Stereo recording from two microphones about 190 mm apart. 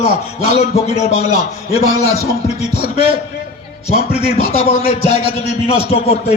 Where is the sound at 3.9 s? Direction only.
35° left (ahead or behind).